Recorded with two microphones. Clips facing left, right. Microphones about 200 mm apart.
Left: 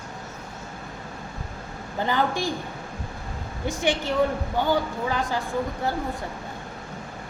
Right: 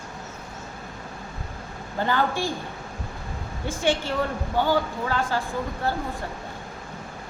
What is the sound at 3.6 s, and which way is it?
Speech, 20° left (ahead or behind).